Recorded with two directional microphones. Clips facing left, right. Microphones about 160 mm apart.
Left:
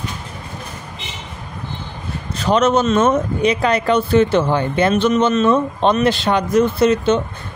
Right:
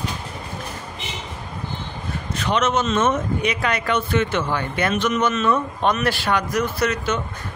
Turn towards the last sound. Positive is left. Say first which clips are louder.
# left 8 dB
turn(degrees=25)  # may be behind; listen again after turning